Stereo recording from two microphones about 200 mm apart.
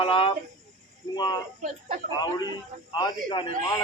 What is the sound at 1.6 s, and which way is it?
Speech, 40° right (ahead or behind).